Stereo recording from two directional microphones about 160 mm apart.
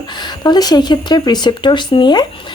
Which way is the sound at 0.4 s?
25° left (ahead or behind).